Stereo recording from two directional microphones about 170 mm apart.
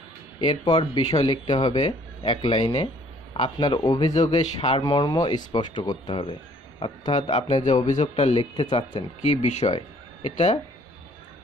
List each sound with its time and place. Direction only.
0.4 s speech: 25° left (ahead or behind)
7.2 s speech: 45° left (ahead or behind)
9.2 s speech: 40° left (ahead or behind)